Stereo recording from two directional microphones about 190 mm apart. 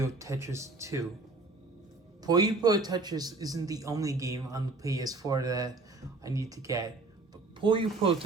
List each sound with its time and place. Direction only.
0.0 s speech: 15° right (ahead or behind)
2.2 s a man's voice: 20° right (ahead or behind)